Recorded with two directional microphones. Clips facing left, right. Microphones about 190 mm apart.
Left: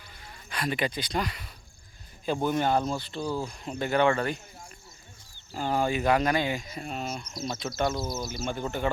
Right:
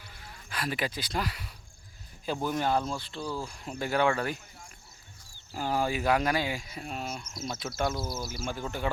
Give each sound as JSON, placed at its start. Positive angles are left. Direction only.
{"t": 0.2, "sound": "speech", "side_deg": 0}
{"t": 3.2, "sound": "speech", "side_deg": 25}
{"t": 3.6, "sound": "speech", "side_deg": -5}
{"t": 5.5, "sound": "speech", "side_deg": -5}